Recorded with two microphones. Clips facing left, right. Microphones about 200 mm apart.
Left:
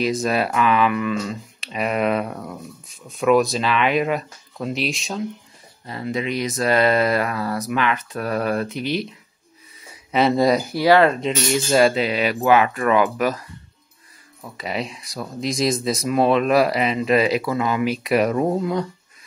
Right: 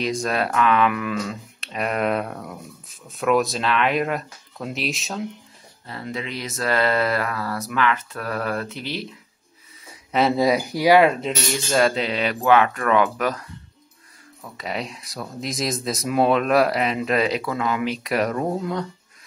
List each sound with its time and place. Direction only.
0.0 s speech: 5° left (ahead or behind)
5.9 s mantra: 15° left (ahead or behind)
10.1 s speech: centre (ahead or behind)
10.7 s speech: 15° right (ahead or behind)
11.7 s mantra: 5° left (ahead or behind)
14.4 s speech: 5° left (ahead or behind)